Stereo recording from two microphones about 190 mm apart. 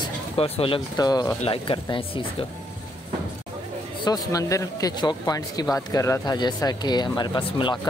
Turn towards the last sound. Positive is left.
turn(degrees=25)  # may be behind; listen again after turning